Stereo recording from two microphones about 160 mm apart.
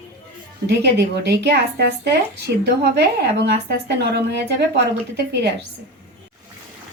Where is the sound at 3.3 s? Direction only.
90° right.